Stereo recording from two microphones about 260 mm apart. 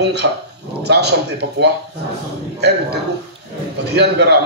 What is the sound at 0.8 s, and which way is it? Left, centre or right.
Speech, right.